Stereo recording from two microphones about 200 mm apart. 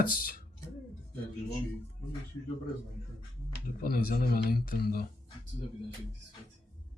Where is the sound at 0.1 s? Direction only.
45° left (ahead or behind).